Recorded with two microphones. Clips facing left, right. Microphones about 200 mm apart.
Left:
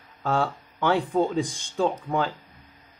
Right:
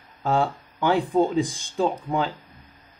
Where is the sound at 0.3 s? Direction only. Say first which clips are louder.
Right 2 dB; 10° right (ahead or behind).